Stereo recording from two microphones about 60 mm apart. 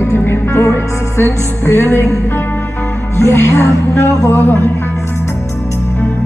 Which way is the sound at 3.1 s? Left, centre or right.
Left.